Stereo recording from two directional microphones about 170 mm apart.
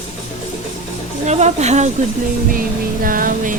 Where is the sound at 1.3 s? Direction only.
40° right (ahead or behind).